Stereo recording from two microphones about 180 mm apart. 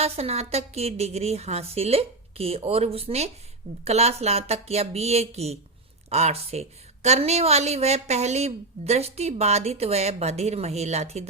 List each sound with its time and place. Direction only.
0.0 s speech: 35° right (ahead or behind)